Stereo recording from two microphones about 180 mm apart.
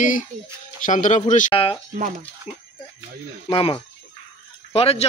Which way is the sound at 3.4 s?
30° left (ahead or behind).